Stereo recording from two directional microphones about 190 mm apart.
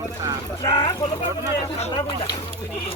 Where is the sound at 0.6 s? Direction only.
20° left (ahead or behind).